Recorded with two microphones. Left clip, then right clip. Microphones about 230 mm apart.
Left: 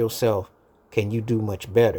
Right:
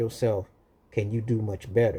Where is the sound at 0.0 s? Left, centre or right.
Left.